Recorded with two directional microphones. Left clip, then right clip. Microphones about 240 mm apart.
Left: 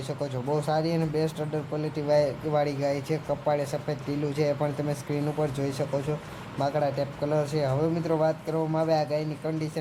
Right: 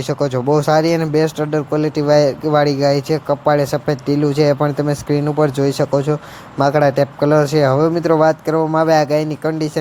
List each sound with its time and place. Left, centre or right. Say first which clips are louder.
0.1 s speech: right 14 dB; right